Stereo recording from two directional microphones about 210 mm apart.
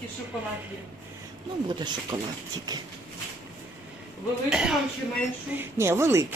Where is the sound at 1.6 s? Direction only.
20° right (ahead or behind).